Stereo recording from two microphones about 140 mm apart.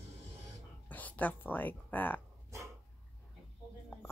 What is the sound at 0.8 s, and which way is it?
Speech, 10° left (ahead or behind).